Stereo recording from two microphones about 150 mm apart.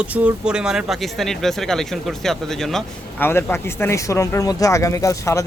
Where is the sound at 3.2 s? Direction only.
15° left (ahead or behind).